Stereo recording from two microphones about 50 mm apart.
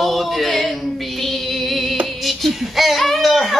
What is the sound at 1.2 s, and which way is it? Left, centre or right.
Music, centre.